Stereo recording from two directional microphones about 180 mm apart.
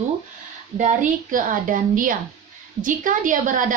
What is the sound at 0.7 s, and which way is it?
A woman's voice, 45° right (ahead or behind).